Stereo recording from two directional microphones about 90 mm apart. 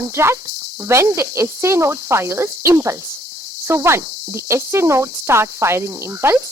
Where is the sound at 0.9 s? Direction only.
30° right (ahead or behind).